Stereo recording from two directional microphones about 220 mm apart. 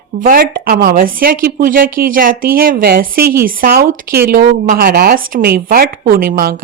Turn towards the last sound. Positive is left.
turn(degrees=-40)  # may be behind; listen again after turning